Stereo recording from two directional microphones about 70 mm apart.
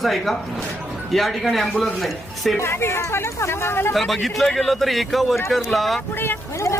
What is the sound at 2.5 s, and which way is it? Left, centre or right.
Speech, left.